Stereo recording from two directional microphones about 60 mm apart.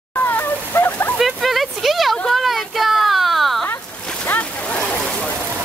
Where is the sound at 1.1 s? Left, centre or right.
Centre.